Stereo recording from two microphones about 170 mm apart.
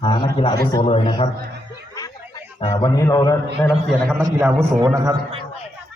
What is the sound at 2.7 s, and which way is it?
Speech, 25° left (ahead or behind).